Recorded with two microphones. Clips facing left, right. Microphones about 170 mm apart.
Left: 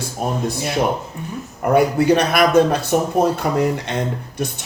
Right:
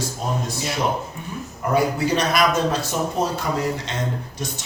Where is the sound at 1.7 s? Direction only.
60° left (ahead or behind).